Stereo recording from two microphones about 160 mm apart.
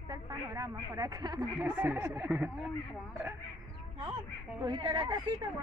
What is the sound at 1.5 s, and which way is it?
Speech, 10° right (ahead or behind).